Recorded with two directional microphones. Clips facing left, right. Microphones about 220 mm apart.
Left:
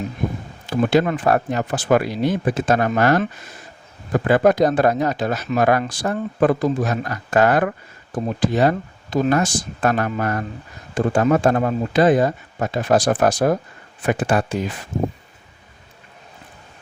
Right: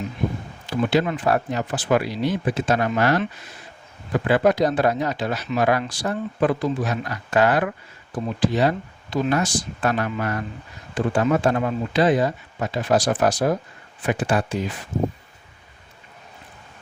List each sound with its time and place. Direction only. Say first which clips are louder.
0.7 s speech: left 3 dB; 45° left (ahead or behind)